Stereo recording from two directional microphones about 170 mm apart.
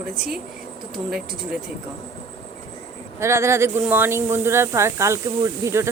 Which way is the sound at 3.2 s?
15° right (ahead or behind).